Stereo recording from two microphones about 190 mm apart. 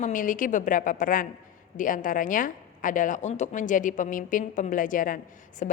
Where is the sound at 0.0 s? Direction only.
45° left (ahead or behind).